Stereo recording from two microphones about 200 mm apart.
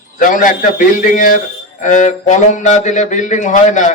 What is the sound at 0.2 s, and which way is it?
A man's voice, 40° left (ahead or behind).